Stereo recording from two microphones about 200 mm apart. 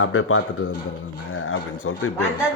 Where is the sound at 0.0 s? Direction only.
90° left.